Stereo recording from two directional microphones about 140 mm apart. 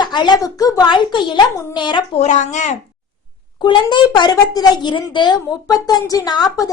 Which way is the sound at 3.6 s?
35° left (ahead or behind).